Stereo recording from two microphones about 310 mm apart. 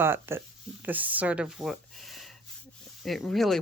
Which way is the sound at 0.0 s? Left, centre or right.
Centre.